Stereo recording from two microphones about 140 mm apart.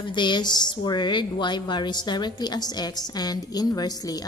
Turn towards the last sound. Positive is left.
turn(degrees=25)  # may be behind; listen again after turning